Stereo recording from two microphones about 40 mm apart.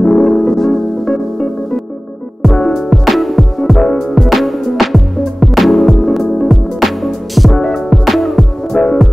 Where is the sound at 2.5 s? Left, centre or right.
Centre.